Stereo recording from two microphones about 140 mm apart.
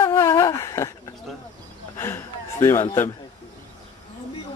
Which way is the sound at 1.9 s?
20° left (ahead or behind).